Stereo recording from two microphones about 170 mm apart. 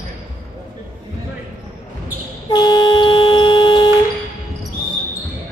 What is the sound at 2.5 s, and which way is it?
Vehicle, 25° left (ahead or behind).